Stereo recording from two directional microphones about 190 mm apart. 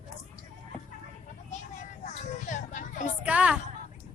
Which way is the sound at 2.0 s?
40° left (ahead or behind).